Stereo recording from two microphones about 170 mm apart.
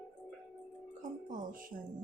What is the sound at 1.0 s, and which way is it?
Music, 50° right (ahead or behind).